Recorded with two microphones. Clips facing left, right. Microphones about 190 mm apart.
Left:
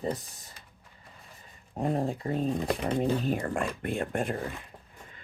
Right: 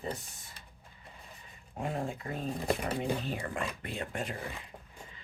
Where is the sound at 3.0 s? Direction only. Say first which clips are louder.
Left 6 dB; 45° left (ahead or behind).